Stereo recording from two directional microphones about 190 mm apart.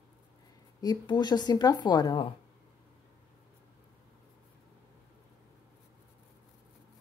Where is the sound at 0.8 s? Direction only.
20° left (ahead or behind).